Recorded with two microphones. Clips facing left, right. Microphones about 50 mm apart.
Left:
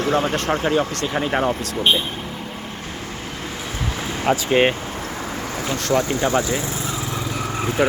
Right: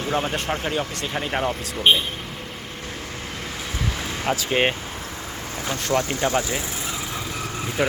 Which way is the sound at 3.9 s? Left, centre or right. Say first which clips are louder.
Left 3 dB; centre.